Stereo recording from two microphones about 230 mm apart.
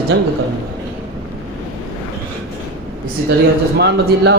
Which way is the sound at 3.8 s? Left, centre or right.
Right.